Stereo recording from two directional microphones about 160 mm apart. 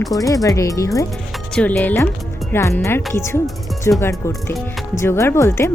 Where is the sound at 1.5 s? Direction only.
10° left (ahead or behind).